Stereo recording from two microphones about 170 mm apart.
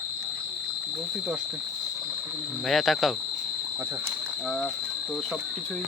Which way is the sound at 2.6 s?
Centre (ahead or behind).